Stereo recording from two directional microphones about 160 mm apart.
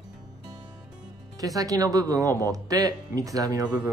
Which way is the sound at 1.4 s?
20° right (ahead or behind).